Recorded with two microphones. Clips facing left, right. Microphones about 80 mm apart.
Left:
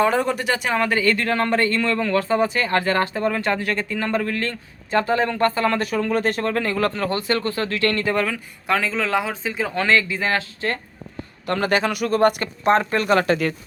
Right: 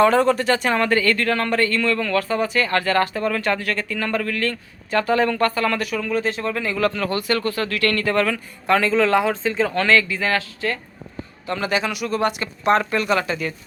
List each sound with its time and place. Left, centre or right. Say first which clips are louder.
0.0 s speech: right 4 dB; centre
8.1 s speech: right 2 dB; centre; by 10.7 s left
11.4 s speech: left 2 dB; left
12.6 s speech: left 1 dB; left
13.2 s speech: left 5 dB; left